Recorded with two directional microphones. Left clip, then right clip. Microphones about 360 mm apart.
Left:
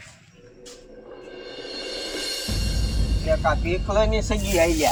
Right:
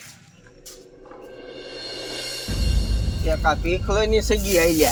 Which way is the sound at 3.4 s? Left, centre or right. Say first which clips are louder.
Right 2 dB; centre.